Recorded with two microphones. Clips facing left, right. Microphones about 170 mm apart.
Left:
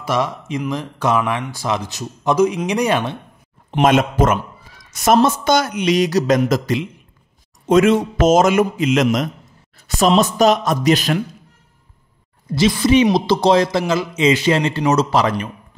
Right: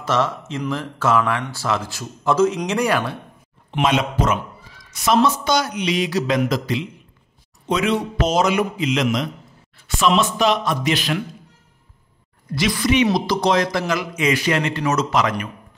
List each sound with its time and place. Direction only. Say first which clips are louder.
0.0 s speech: even; 10° left (ahead or behind)
3.7 s a man's voice: left 5 dB; 45° left (ahead or behind)
12.4 s speech: left 5 dB; 25° left (ahead or behind)